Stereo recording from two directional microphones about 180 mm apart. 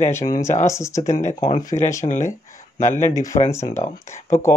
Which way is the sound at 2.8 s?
15° left (ahead or behind).